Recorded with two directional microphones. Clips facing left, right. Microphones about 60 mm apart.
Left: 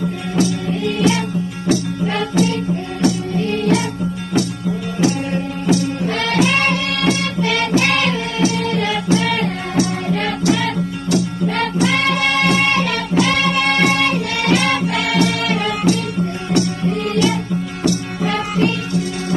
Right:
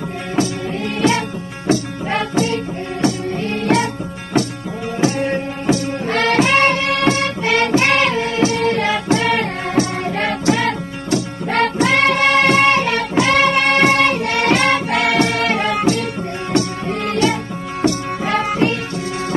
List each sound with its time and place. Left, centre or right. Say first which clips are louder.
0.4 s music: left 1 dB; right
5.7 s music: left 1 dB; right
17.8 s music: right 2 dB; right